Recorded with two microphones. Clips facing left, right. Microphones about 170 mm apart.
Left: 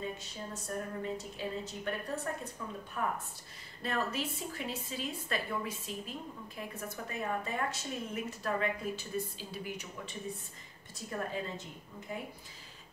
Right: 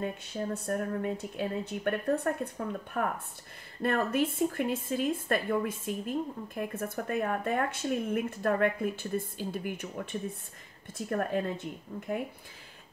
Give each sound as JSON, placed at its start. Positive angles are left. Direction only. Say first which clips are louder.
{"t": 0.0, "sound": "speech", "louder": "right 7 dB", "side_deg": -60}